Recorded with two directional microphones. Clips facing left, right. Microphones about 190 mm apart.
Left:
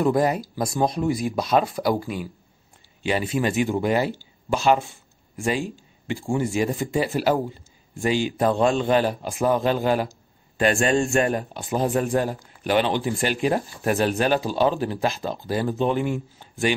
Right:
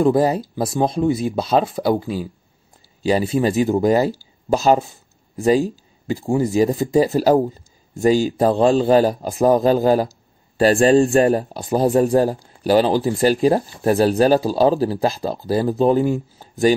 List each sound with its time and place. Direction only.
0.0 s speech: 30° right (ahead or behind)